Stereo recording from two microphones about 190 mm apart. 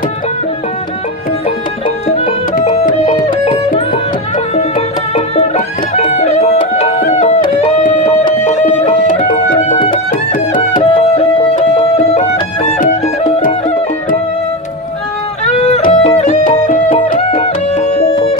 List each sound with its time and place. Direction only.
2.0 s music: 35° left (ahead or behind)
2.5 s music: 45° left (ahead or behind)
4.6 s music: 30° left (ahead or behind)
9.1 s music: 45° left (ahead or behind)
10.8 s music: 30° left (ahead or behind)
15.4 s music: 35° left (ahead or behind)
18.1 s music: 25° left (ahead or behind)